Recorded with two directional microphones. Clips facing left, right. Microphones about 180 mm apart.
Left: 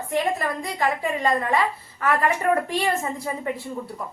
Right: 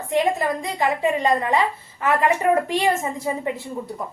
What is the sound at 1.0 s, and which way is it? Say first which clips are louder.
Speech: right 3 dB; 20° right (ahead or behind).